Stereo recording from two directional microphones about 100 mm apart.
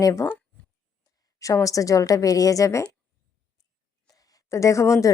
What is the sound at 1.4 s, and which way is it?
Speech, 35° left (ahead or behind).